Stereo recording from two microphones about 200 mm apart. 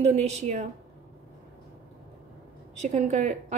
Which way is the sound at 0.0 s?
35° right (ahead or behind).